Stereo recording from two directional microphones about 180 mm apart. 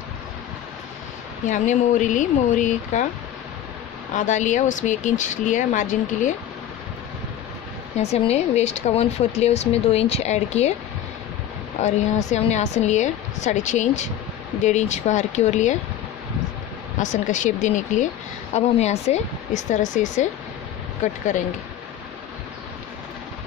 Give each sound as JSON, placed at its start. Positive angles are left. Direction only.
{"t": 1.4, "sound": "a woman's voice", "side_deg": 45}
{"t": 4.1, "sound": "a woman's voice", "side_deg": 45}
{"t": 8.0, "sound": "speech", "side_deg": 35}
{"t": 11.8, "sound": "speech", "side_deg": 40}
{"t": 17.0, "sound": "a woman's voice", "side_deg": 45}